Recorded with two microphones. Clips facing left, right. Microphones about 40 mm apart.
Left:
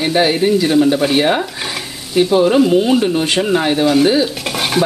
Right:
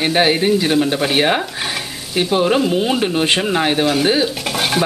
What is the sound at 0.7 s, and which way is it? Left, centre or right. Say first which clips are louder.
Frying: left 3 dB; centre.